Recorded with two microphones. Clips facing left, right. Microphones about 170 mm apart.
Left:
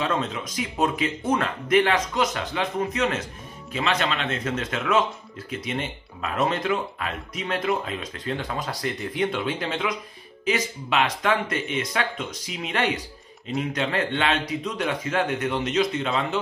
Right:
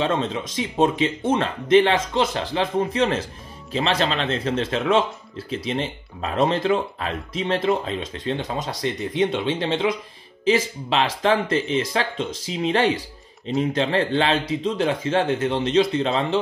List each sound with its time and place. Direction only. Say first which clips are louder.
0.0 s speech: right 3 dB; 30° right (ahead or behind)